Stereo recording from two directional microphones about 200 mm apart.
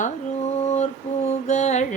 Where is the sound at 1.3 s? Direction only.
35° left (ahead or behind).